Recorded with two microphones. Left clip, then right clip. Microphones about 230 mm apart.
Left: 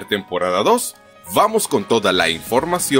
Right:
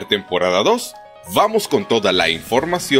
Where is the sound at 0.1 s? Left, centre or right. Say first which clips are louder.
Right 2 dB; centre.